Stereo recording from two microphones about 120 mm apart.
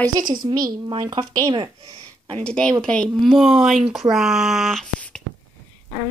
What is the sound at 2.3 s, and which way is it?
A woman's voice, 5° left (ahead or behind).